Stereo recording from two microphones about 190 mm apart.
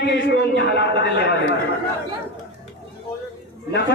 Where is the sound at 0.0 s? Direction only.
65° left (ahead or behind).